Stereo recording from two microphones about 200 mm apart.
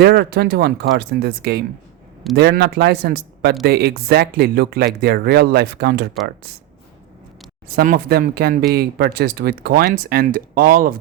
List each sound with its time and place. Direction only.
0.0 s speech: 55° right (ahead or behind)
7.8 s speech: 50° right (ahead or behind)